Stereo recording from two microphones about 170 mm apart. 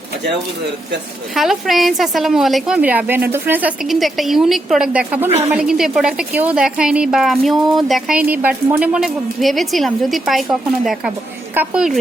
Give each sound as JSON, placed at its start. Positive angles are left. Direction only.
{"t": 1.4, "sound": "a woman's voice", "side_deg": 0}
{"t": 11.5, "sound": "a woman's voice", "side_deg": -10}